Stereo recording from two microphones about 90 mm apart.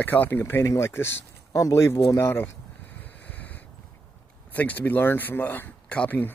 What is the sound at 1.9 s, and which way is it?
Speech, 45° left (ahead or behind).